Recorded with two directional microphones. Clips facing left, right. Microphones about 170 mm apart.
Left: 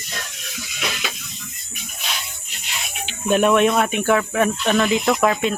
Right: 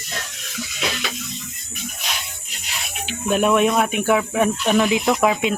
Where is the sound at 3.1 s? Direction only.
5° right (ahead or behind).